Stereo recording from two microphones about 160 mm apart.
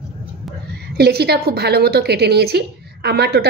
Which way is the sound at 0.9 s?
85° right.